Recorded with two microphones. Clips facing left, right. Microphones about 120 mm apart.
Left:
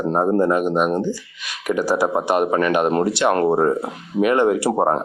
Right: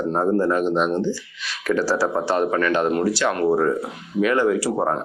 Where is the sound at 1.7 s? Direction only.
15° left (ahead or behind).